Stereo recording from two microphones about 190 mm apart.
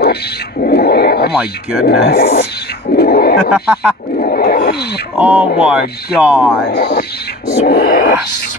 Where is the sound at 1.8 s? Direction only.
55° left (ahead or behind).